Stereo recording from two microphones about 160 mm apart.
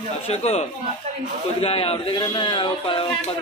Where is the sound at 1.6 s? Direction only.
40° left (ahead or behind).